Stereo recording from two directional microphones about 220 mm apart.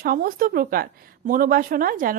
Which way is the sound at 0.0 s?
40° right (ahead or behind).